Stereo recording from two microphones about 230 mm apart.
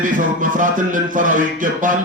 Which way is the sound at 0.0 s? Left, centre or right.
Right.